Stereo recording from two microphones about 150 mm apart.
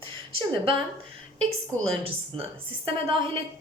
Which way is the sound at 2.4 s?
35° right (ahead or behind).